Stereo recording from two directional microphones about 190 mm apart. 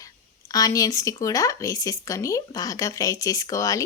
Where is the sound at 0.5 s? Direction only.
20° left (ahead or behind).